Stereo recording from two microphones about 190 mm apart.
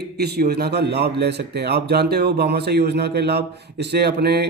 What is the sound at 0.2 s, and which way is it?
A man's voice, 55° right (ahead or behind).